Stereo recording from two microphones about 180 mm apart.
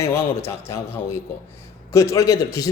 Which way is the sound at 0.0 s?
15° left (ahead or behind).